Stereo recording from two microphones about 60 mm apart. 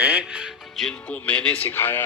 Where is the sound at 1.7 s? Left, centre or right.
Left.